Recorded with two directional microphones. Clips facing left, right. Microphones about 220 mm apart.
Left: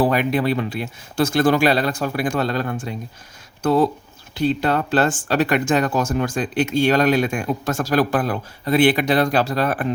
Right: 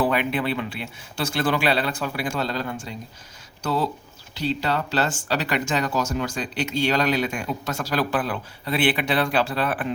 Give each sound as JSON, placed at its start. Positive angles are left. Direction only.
{"t": 0.0, "sound": "speech", "side_deg": 40}
{"t": 2.3, "sound": "speech", "side_deg": 55}